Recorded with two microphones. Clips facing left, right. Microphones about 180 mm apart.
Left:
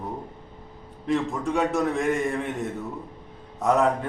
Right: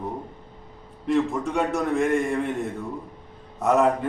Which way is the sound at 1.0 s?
Centre (ahead or behind).